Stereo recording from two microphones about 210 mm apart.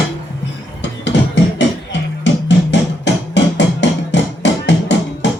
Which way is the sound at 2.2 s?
60° left (ahead or behind).